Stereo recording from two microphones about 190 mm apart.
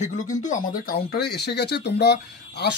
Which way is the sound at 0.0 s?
40° left (ahead or behind).